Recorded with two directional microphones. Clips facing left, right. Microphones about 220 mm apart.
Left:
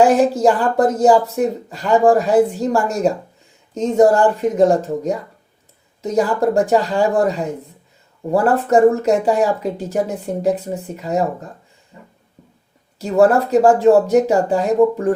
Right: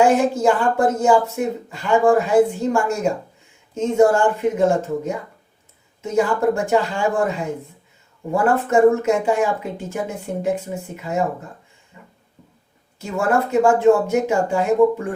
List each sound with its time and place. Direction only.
0.0 s speech: 35° left (ahead or behind)
13.0 s speech: 35° left (ahead or behind)